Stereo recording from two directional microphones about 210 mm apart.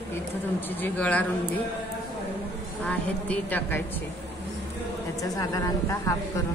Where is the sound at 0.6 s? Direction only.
10° left (ahead or behind).